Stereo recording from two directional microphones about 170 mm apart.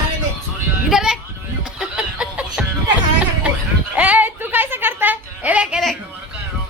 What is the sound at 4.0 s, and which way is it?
Speech, 10° right (ahead or behind).